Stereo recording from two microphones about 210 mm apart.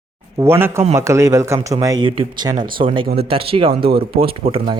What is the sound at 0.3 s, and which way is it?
A man's voice, 10° right (ahead or behind).